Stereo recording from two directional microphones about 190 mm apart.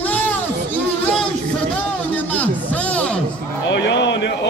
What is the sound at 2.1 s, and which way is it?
Music, 10° left (ahead or behind).